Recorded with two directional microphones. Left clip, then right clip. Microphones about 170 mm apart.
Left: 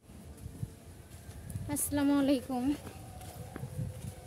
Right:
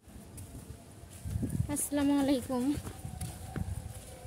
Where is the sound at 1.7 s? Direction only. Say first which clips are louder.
Even; 20° left (ahead or behind).